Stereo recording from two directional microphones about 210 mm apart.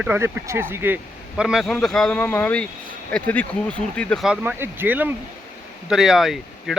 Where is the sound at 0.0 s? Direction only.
10° right (ahead or behind).